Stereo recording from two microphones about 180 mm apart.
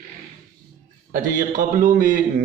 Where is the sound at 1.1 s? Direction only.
45° right (ahead or behind).